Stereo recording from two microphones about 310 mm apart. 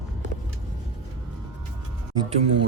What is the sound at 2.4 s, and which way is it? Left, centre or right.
Speech, right.